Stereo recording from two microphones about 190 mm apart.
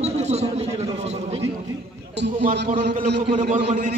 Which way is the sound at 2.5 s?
45° right (ahead or behind).